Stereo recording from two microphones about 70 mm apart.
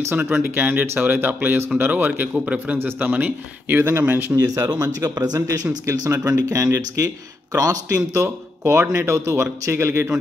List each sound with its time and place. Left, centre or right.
0.1 s a man's voice: right; by 2.8 s centre
2.8 s a man's voice: right
4.4 s a man's voice: right